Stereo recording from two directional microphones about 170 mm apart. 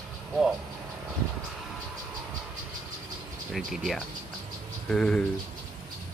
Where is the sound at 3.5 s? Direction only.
Centre (ahead or behind).